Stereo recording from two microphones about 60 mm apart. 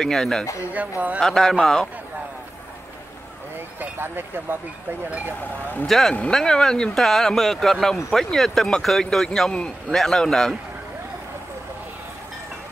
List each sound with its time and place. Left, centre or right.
0.0 s speech: centre
0.7 s speech: right
1.2 s speech: centre
3.8 s speech: right
5.9 s speech: centre